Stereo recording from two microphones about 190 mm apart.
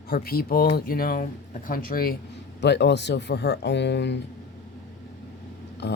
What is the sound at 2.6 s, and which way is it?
Speech, 65° left (ahead or behind).